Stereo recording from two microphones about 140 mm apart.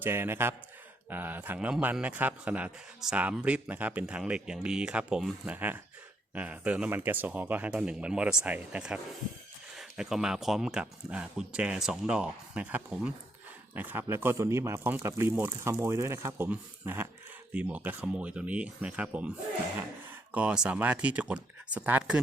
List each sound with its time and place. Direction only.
0.0 s a man's voice: 15° right (ahead or behind)